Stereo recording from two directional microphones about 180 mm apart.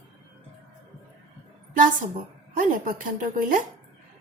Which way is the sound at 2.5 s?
50° right (ahead or behind).